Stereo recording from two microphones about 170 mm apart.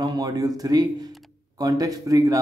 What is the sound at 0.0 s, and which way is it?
A man's voice, 20° right (ahead or behind).